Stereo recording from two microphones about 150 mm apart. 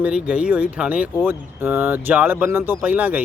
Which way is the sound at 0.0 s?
10° right (ahead or behind).